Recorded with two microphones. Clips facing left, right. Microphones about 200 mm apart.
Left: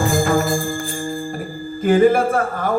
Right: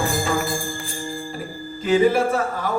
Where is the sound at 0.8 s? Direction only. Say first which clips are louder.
Left 5 dB; 50° left (ahead or behind).